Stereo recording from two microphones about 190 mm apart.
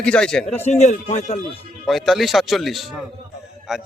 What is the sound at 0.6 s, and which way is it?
Speech, 35° left (ahead or behind).